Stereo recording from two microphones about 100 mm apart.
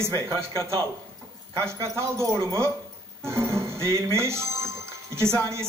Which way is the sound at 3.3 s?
25° right (ahead or behind).